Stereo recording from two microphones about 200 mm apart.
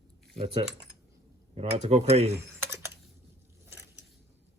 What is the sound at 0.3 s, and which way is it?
Speech, 30° right (ahead or behind).